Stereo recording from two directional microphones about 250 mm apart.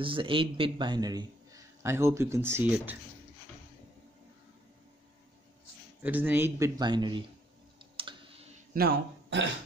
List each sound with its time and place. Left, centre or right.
0.0 s a man's voice: right
6.0 s a man's voice: centre
7.8 s clicking: right
8.7 s speech: right